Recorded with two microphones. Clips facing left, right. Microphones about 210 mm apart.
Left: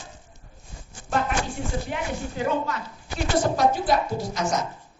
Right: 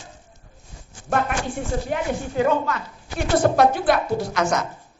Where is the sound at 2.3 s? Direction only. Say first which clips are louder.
Right 6 dB; 65° right (ahead or behind).